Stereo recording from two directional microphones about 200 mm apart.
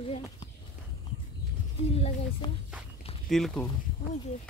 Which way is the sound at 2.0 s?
30° left (ahead or behind).